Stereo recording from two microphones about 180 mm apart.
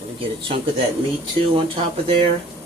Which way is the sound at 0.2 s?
30° right (ahead or behind).